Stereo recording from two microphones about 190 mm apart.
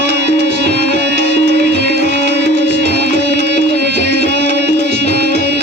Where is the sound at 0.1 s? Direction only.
65° right (ahead or behind).